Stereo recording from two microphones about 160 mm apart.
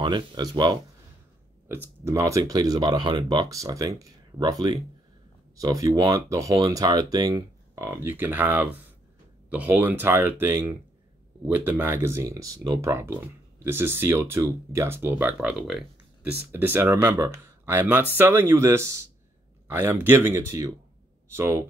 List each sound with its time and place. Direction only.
0.0 s speech: 30° right (ahead or behind)